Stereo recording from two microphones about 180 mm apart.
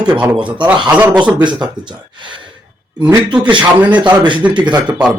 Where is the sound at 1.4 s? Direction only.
25° right (ahead or behind).